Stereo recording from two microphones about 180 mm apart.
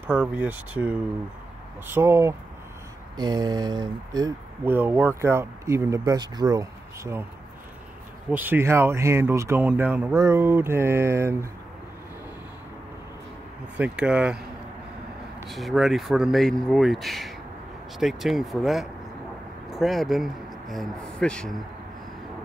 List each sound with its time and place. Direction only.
0.0 s speech: 5° right (ahead or behind)
8.3 s speech: 10° right (ahead or behind)
13.7 s speech: 5° right (ahead or behind)
15.5 s speech: centre (ahead or behind)